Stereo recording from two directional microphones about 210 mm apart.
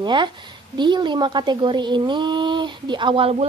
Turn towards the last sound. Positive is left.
turn(degrees=-25)  # may be behind; listen again after turning